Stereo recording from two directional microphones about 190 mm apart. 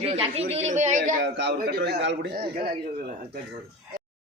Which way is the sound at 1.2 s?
65° right (ahead or behind).